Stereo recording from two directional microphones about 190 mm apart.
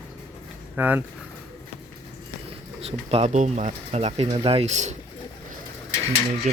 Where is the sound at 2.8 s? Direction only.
30° right (ahead or behind).